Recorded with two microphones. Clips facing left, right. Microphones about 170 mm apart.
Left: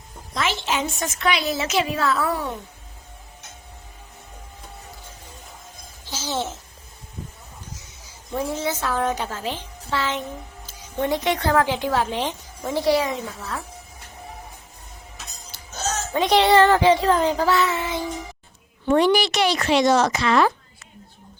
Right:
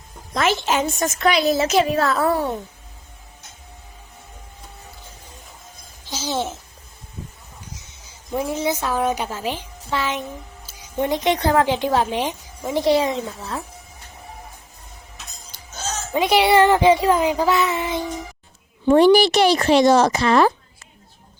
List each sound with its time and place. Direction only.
0.3 s a woman's voice: 50° right (ahead or behind)
6.1 s a sound: 15° right (ahead or behind)
8.3 s a woman's voice: 15° right (ahead or behind)
16.1 s a woman's voice: 10° right (ahead or behind)
19.1 s speech: 35° right (ahead or behind)